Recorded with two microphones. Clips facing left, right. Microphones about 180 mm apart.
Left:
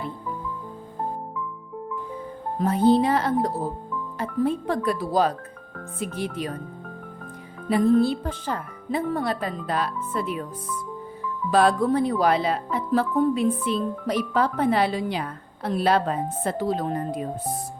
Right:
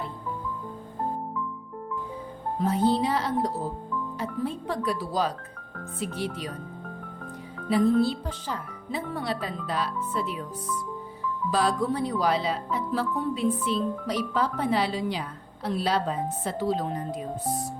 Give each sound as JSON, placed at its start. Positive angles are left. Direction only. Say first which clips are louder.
{"t": 2.6, "sound": "speech", "louder": "left 5 dB", "side_deg": 55}
{"t": 8.0, "sound": "speech", "louder": "left 4 dB", "side_deg": 50}
{"t": 11.5, "sound": "speech", "louder": "left 6 dB", "side_deg": 55}